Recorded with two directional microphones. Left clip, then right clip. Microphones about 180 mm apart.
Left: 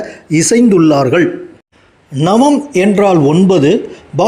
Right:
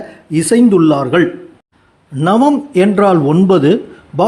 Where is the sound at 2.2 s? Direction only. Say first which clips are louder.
Left 2 dB; 10° right (ahead or behind).